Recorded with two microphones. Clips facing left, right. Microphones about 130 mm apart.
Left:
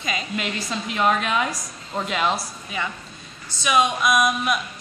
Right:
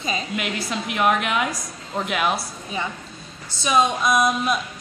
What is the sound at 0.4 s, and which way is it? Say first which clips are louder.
A woman's voice: right 1 dB; 10° right (ahead or behind).